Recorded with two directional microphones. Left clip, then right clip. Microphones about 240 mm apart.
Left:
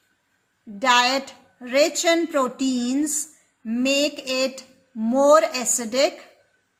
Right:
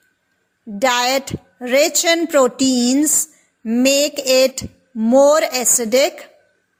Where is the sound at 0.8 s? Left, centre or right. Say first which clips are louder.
Right 2 dB; right.